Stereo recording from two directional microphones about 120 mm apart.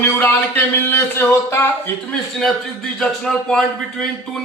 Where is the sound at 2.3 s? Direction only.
5° left (ahead or behind).